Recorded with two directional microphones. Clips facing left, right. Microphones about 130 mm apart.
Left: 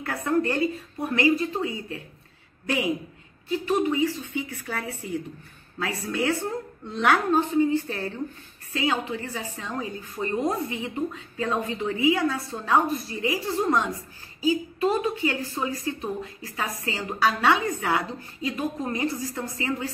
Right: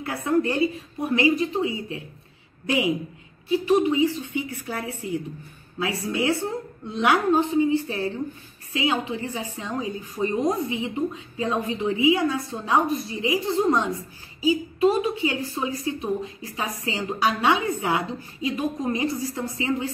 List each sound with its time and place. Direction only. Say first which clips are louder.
0.0 s a woman's voice: right 2 dB; 15° right (ahead or behind)